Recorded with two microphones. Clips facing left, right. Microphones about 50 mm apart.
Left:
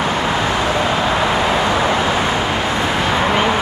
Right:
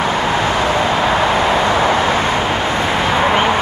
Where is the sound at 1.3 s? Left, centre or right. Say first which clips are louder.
Right 2 dB; right.